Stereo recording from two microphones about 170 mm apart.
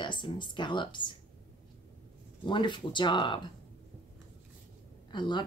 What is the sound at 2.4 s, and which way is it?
Speech, 30° left (ahead or behind).